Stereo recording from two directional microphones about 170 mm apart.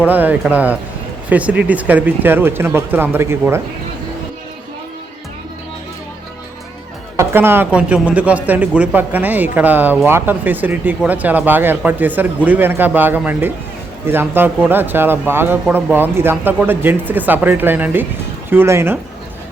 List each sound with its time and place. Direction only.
0.0 s speech: 10° right (ahead or behind)
7.2 s speech: 15° right (ahead or behind)